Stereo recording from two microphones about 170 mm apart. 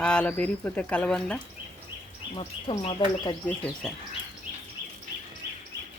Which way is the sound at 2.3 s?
30° left (ahead or behind).